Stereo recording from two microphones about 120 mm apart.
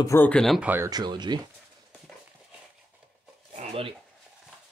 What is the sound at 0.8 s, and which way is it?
Speech, 35° right (ahead or behind).